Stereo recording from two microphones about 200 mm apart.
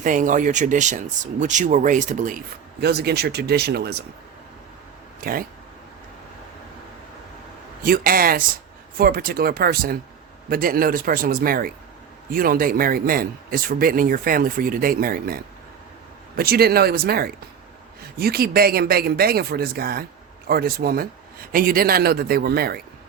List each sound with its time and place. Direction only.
0.0 s speech: 40° right (ahead or behind)
2.8 s speech: 55° right (ahead or behind)
5.2 s speech: 45° right (ahead or behind)
7.9 s speech: 45° right (ahead or behind)